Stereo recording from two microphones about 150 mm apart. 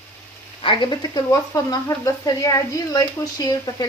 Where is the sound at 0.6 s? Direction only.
30° left (ahead or behind).